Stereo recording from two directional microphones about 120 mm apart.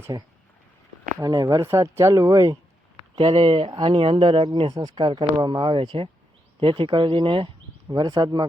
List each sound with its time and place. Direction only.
0.1 s speech: 35° right (ahead or behind)
3.2 s speech: 50° right (ahead or behind)
4.7 s speech: 35° right (ahead or behind)